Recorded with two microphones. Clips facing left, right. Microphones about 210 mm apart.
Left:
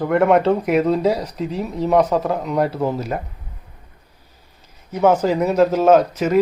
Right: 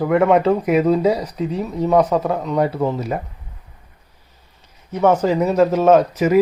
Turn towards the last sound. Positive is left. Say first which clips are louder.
# right 1 dB
turn(degrees=0)  # may be behind; listen again after turning